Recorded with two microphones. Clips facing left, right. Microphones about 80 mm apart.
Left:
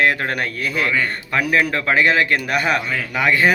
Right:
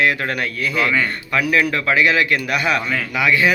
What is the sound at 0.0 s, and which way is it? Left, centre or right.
A man's voice, left.